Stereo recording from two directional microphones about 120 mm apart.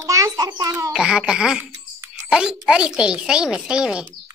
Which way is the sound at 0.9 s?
5° right (ahead or behind).